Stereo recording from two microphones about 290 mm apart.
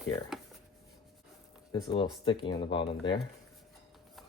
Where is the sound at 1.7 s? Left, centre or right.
Centre.